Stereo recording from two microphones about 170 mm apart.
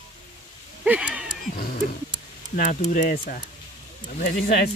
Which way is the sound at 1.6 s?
55° left (ahead or behind).